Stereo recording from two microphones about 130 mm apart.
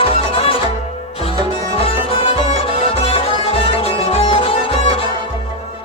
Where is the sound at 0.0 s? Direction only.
45° left (ahead or behind).